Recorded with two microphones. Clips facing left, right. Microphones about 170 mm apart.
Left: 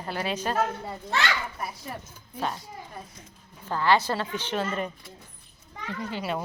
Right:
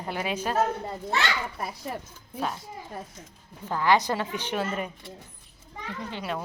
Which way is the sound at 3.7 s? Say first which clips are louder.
Even; 15° right (ahead or behind).